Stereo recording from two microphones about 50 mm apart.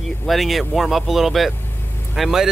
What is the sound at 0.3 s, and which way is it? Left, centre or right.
Speech, centre.